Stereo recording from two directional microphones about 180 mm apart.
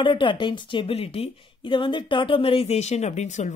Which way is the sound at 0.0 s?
25° left (ahead or behind).